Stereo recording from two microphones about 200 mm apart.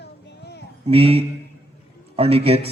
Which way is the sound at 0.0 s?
55° left (ahead or behind).